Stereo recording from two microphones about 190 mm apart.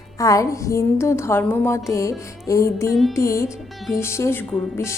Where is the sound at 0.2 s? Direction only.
15° left (ahead or behind).